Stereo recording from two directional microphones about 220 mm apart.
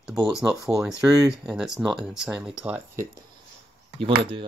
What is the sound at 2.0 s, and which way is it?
Speech, 5° right (ahead or behind).